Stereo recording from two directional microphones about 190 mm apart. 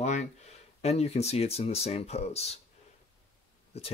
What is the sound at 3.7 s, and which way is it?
Speech, 35° left (ahead or behind).